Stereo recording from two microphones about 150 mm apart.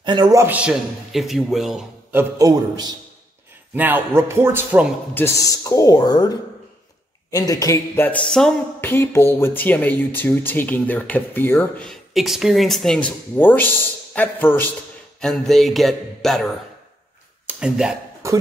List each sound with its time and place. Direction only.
0.0 s a man's voice: 30° right (ahead or behind); by 1.9 s centre (ahead or behind)
2.1 s a man's voice: 20° right (ahead or behind)
3.7 s a man's voice: 10° right (ahead or behind)
5.1 s speech: 20° left (ahead or behind)
8.9 s a man's voice: 15° left (ahead or behind); by 17.9 s 5° right (ahead or behind)